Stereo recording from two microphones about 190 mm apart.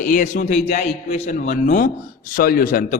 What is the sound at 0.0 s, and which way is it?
A man's voice, 45° left (ahead or behind).